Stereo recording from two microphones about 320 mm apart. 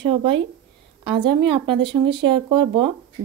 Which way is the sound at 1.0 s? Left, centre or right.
Centre.